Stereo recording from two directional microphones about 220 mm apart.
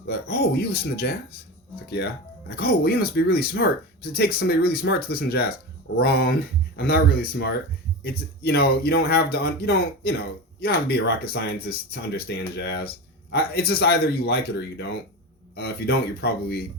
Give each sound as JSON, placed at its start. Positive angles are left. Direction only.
{"t": 0.1, "sound": "speech", "side_deg": 45}
{"t": 2.6, "sound": "speech", "side_deg": 45}
{"t": 15.5, "sound": "speech", "side_deg": 45}